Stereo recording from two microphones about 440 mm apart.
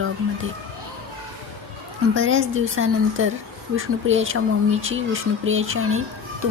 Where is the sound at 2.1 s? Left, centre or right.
Right.